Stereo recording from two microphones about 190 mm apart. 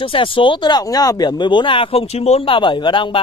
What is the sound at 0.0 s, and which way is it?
Speech, 30° left (ahead or behind).